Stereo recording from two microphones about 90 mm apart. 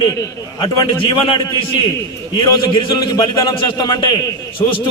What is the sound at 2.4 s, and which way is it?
A man's voice, 50° left (ahead or behind).